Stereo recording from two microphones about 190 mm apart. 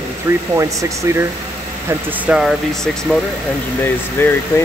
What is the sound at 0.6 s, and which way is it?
Speech, 15° right (ahead or behind).